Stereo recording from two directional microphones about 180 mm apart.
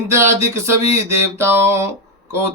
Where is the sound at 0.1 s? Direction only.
15° right (ahead or behind).